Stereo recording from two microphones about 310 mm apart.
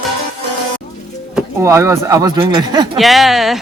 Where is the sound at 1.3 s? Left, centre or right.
Centre.